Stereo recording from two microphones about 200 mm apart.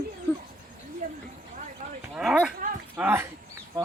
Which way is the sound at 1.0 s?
45° right (ahead or behind).